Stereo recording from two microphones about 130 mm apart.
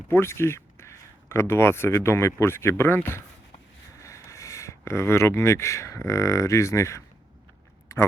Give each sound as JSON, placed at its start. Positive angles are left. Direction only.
{"t": 0.1, "sound": "speech", "side_deg": 20}